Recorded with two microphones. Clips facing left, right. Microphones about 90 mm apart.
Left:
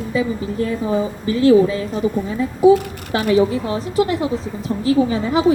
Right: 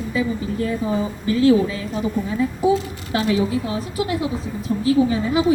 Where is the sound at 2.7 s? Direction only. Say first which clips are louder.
Left 3 dB; 50° left (ahead or behind).